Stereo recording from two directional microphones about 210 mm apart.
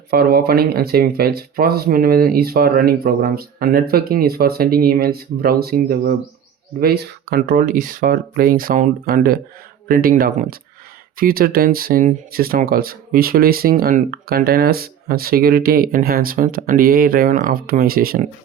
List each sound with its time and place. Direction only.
0.1 s speech: 45° right (ahead or behind)